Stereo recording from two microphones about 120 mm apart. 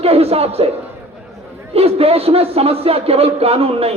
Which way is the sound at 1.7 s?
55° right (ahead or behind).